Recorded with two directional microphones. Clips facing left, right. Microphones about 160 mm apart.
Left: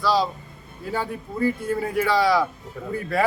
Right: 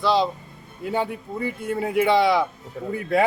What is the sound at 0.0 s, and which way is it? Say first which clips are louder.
Speech: right 1 dB; 20° right (ahead or behind).